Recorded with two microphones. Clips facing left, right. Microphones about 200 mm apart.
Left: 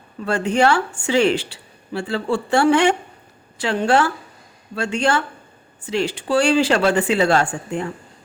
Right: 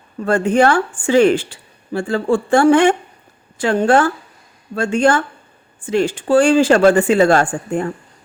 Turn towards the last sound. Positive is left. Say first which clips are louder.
# right 4 dB
turn(degrees=-50)  # may be behind; listen again after turning